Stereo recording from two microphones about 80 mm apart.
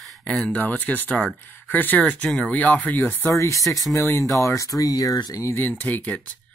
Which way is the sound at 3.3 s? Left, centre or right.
Left.